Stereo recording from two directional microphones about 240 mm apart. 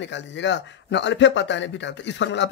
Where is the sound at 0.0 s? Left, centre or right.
Left.